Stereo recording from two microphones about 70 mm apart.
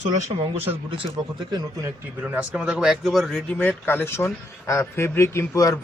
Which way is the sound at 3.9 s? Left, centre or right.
Left.